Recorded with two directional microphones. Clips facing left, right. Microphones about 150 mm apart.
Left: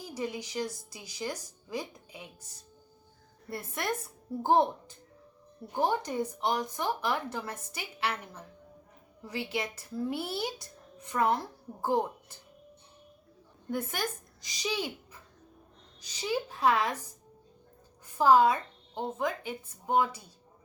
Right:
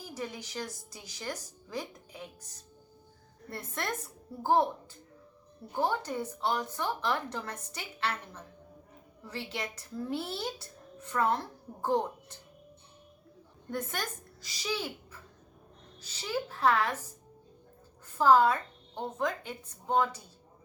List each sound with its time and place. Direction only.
0.0 s a child's voice: 10° left (ahead or behind)
3.5 s a child's voice: 10° left (ahead or behind)
5.7 s a child's voice: 15° left (ahead or behind)
13.7 s a child's voice: 10° left (ahead or behind)
18.2 s a child's voice: 15° left (ahead or behind)